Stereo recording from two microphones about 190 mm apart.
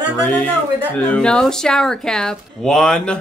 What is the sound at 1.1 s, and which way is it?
Speech, 5° left (ahead or behind).